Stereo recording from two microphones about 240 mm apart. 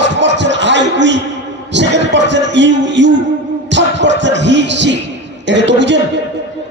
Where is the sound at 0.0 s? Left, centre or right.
Right.